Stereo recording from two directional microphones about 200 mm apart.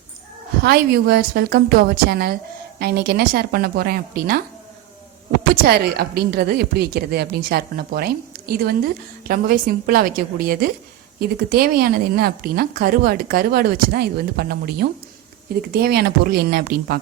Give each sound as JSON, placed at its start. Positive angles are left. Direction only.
{"t": 0.6, "sound": "speech", "side_deg": -50}
{"t": 5.6, "sound": "speech", "side_deg": -50}